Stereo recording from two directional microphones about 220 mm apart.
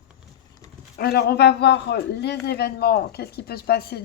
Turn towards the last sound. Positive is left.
turn(degrees=45)  # may be behind; listen again after turning